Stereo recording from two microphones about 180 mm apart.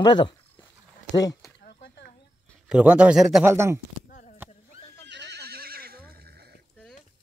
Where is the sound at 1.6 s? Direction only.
70° left (ahead or behind).